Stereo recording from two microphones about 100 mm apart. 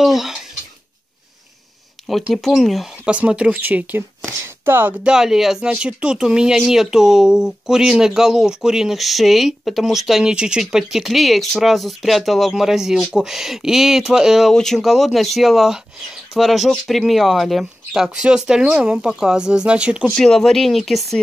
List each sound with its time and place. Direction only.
0.0 s speech: 5° right (ahead or behind)
2.3 s speech: centre (ahead or behind)
3.1 s speech: 10° right (ahead or behind)
4.3 s a sound: 20° right (ahead or behind)
5.0 s speech: 5° right (ahead or behind)
20.1 s speech: 5° left (ahead or behind)